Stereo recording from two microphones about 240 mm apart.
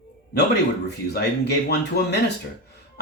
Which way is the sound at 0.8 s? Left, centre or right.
Left.